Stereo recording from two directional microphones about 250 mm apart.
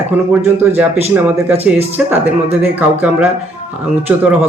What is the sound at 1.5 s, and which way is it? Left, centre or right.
Speech, right.